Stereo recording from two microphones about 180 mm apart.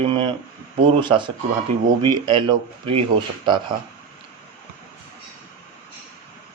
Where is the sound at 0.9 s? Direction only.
25° right (ahead or behind).